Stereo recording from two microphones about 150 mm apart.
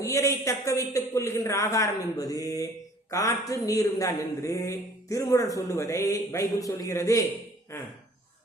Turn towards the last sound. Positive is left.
turn(degrees=20)  # may be behind; listen again after turning